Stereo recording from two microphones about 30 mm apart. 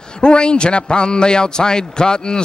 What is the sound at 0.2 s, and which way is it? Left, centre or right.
Speech, left.